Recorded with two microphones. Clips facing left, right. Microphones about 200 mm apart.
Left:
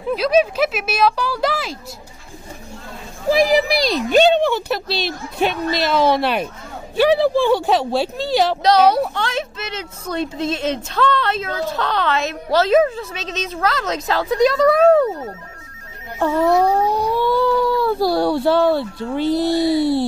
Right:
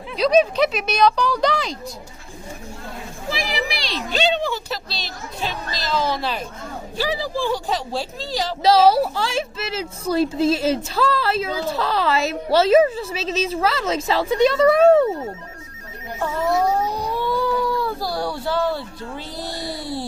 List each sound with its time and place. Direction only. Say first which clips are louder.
0.1 s a woman's voice: even; 5° left (ahead or behind)
3.4 s speech: left 10 dB; 40° left (ahead or behind); by 8.5 s 65° left (ahead or behind)
8.6 s a woman's voice: right 2 dB; 5° right (ahead or behind)
16.2 s speech: left 5 dB; 70° left (ahead or behind)